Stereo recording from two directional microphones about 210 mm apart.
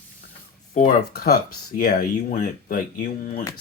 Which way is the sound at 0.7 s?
35° left (ahead or behind).